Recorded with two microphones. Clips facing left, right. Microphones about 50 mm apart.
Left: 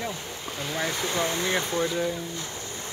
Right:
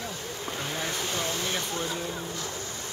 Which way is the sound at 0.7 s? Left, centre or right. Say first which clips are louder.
Left 6 dB; left.